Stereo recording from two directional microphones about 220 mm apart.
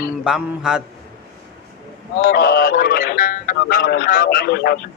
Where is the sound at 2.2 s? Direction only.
45° left (ahead or behind).